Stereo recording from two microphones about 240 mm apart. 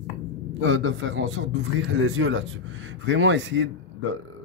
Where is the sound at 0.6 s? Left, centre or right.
Right.